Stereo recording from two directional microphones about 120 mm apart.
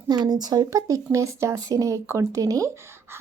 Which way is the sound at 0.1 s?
35° right (ahead or behind).